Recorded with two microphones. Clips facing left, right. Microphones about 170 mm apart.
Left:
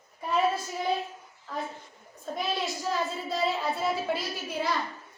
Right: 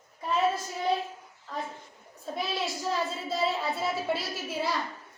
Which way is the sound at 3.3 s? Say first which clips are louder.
Even; centre (ahead or behind).